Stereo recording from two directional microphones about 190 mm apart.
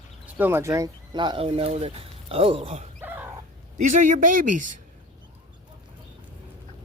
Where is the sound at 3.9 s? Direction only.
45° right (ahead or behind).